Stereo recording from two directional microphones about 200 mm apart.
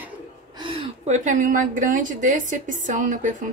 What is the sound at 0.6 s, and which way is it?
A woman's voice, 25° right (ahead or behind).